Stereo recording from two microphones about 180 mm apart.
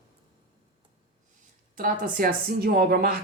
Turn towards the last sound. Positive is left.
turn(degrees=-55)  # may be behind; listen again after turning